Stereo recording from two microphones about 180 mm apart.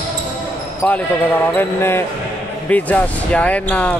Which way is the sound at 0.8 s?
5° left (ahead or behind).